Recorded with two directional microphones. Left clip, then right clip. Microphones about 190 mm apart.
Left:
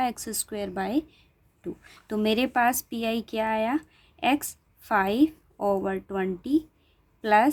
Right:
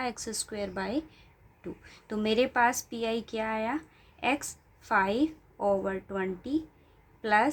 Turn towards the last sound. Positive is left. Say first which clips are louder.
# left 4 dB
turn(degrees=45)  # may be behind; listen again after turning